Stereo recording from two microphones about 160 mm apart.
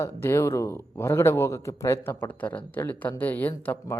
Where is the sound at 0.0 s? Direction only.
15° left (ahead or behind).